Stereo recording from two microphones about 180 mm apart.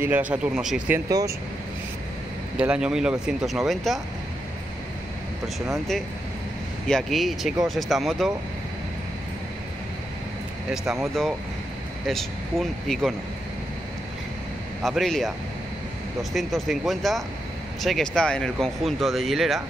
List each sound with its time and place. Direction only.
0.0 s a man's voice: 10° right (ahead or behind)
1.0 s speech: 20° right (ahead or behind)
2.5 s speech: 5° right (ahead or behind)
6.9 s speech: centre (ahead or behind)
10.7 s speech: centre (ahead or behind)
14.8 s speech: centre (ahead or behind)